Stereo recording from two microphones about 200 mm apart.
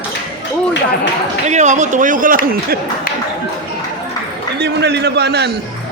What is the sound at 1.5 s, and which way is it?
A man's voice, 35° right (ahead or behind).